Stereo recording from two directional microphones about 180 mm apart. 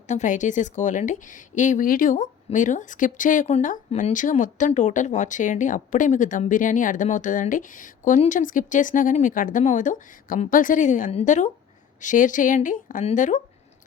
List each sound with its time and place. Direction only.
0.1 s a woman's voice: 40° left (ahead or behind)